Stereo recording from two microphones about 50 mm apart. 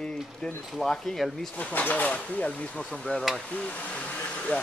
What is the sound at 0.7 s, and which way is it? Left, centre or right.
Speech, centre.